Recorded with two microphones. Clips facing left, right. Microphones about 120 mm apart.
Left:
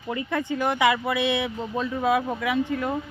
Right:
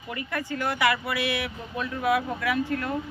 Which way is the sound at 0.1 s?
20° left (ahead or behind).